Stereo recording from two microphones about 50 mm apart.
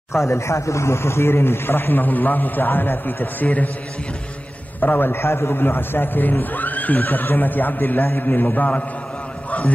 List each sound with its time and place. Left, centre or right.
0.1 s speech: left
4.7 s a man's voice: left